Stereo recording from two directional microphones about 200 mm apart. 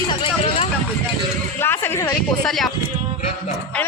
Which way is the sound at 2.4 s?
Centre (ahead or behind).